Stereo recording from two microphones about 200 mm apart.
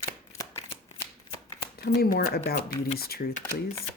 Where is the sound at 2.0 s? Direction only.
50° left (ahead or behind).